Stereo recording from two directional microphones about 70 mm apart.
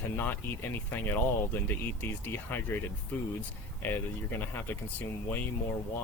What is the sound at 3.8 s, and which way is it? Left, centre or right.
Speech, left.